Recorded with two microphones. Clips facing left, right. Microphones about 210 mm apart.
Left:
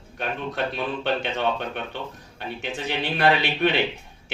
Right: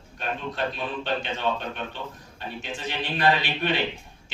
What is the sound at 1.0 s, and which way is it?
Speech, 65° left (ahead or behind).